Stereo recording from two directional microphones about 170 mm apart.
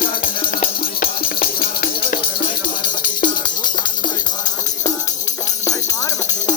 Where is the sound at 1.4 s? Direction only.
55° left (ahead or behind).